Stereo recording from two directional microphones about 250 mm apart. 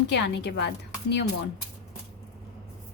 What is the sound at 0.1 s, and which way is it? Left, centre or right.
Speech, left.